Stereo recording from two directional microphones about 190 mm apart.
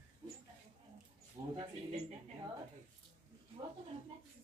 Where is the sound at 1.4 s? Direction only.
35° right (ahead or behind).